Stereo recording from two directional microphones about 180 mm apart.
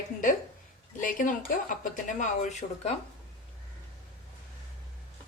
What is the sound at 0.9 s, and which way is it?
Speech, 50° left (ahead or behind).